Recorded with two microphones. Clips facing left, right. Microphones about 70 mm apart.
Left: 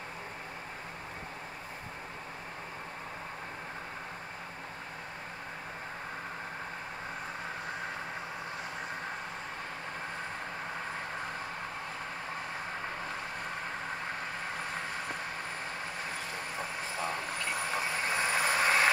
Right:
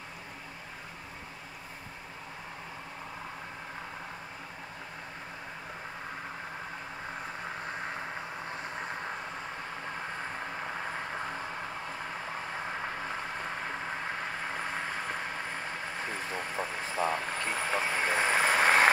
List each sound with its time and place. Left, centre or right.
16.3 s vehicle: right